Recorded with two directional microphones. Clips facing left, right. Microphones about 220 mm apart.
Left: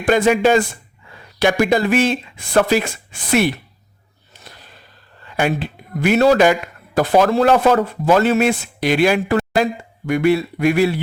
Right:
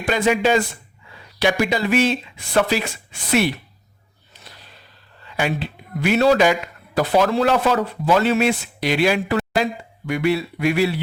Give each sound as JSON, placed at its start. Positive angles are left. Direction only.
{"t": 0.0, "sound": "speech", "side_deg": 50}
{"t": 5.2, "sound": "speech", "side_deg": 50}